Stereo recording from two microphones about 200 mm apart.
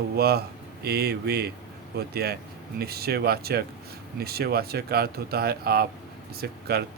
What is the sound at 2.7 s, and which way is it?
Speech, 50° right (ahead or behind).